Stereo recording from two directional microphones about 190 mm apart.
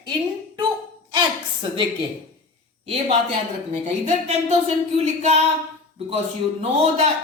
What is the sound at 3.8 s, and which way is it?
A woman's voice, 35° right (ahead or behind).